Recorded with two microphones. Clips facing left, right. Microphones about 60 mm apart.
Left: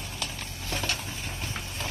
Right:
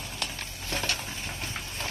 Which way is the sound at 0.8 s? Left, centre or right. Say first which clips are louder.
Even; centre.